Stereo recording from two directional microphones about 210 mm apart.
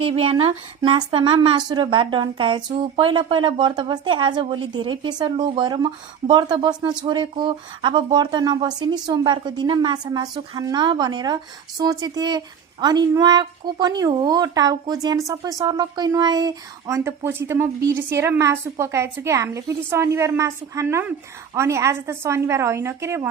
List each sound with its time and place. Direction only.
0.0 s speech: 25° right (ahead or behind)